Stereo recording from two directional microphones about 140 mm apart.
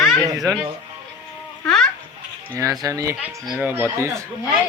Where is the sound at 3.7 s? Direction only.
20° right (ahead or behind).